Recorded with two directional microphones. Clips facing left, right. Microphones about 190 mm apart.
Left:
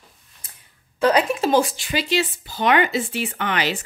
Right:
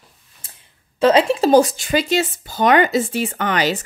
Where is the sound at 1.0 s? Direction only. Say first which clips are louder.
Right 4 dB; 25° right (ahead or behind).